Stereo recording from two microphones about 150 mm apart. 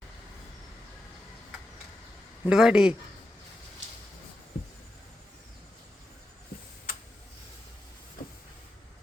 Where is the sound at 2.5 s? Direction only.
5° right (ahead or behind).